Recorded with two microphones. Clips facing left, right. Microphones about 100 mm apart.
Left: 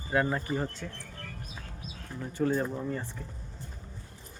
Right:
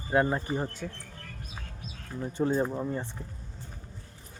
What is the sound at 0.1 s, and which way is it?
Speech, 25° right (ahead or behind).